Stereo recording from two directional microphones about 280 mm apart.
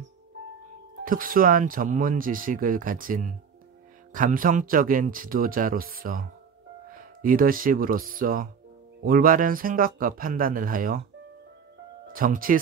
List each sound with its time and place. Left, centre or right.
1.0 s speech: right
12.1 s speech: right